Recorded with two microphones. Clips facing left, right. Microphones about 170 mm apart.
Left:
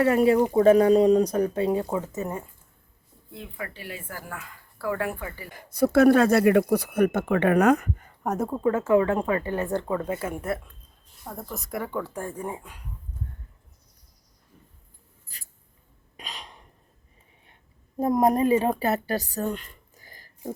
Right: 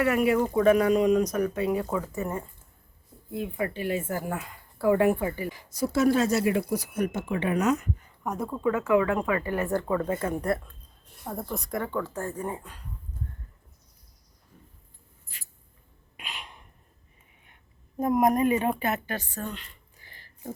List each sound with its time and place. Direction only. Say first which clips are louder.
0.0 s speech: left 4 dB; 30° left (ahead or behind)
3.6 s speech: right 8 dB; 20° right (ahead or behind)
5.5 s speech: left 6 dB; 55° left (ahead or behind)
8.4 s speech: left 2 dB; 30° left (ahead or behind)
9.8 s speech: right 1 dB; 10° left (ahead or behind)
16.1 s cough: left 1 dB; 35° left (ahead or behind)
18.0 s speech: left 1 dB; 30° left (ahead or behind)